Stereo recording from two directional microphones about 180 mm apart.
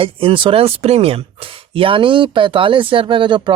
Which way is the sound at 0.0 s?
30° right (ahead or behind).